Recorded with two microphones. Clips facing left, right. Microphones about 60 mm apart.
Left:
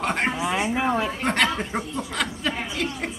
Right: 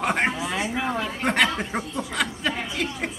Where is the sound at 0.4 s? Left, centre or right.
Centre.